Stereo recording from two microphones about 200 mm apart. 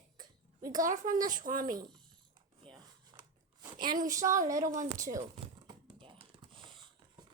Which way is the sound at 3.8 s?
40° right (ahead or behind).